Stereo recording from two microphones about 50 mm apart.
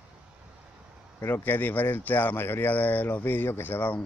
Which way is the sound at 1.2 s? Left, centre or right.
Left.